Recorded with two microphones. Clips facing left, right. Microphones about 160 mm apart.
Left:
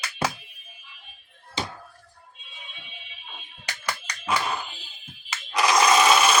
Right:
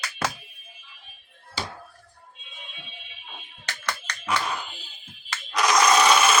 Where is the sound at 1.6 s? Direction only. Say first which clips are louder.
Left 2 dB; 20° left (ahead or behind).